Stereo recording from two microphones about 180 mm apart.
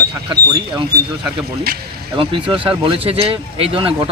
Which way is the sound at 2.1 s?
30° right (ahead or behind).